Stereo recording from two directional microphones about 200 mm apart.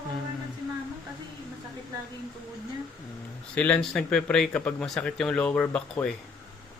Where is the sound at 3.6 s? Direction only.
5° left (ahead or behind).